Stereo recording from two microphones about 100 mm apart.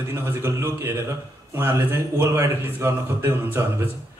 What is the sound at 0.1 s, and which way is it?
A man's voice, 25° right (ahead or behind).